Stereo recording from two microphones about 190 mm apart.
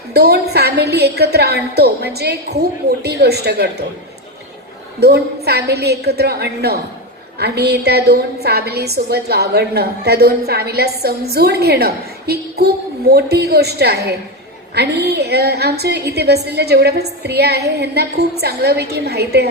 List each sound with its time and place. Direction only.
0.1 s a woman's voice: 60° right (ahead or behind)
4.9 s a woman's voice: 60° right (ahead or behind)